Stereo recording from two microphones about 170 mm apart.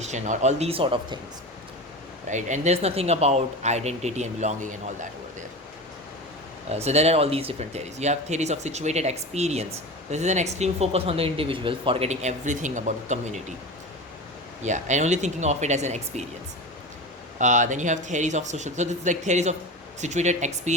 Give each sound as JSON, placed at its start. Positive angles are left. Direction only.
{"t": 0.0, "sound": "speech", "side_deg": -45}
{"t": 2.3, "sound": "speech", "side_deg": -45}
{"t": 6.7, "sound": "speech", "side_deg": -40}
{"t": 14.6, "sound": "speech", "side_deg": -45}
{"t": 17.3, "sound": "speech", "side_deg": -45}